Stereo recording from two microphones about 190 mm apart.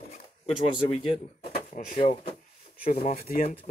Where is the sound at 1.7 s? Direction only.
50° left (ahead or behind).